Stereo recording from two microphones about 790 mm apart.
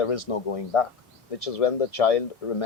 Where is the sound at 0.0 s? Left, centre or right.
Left.